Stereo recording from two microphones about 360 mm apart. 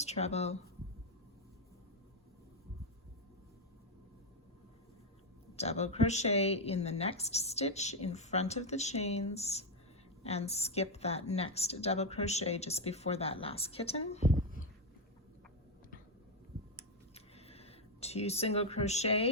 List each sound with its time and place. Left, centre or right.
0.0 s speech: centre
5.5 s a woman's voice: centre
17.2 s a sound: centre